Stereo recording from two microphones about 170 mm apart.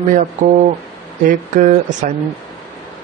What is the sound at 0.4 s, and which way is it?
Speech, 50° right (ahead or behind).